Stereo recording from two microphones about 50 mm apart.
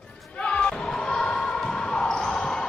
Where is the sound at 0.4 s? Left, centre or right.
Left.